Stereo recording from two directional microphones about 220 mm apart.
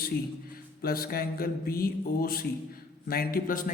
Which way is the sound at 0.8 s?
45° left (ahead or behind).